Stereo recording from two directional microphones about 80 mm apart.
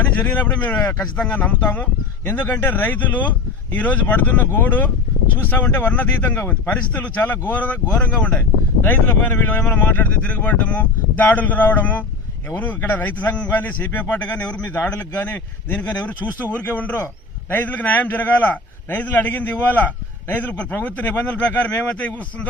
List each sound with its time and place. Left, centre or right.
0.0 s a man's voice: left